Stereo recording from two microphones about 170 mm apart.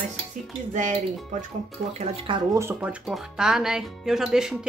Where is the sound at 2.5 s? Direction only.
10° right (ahead or behind).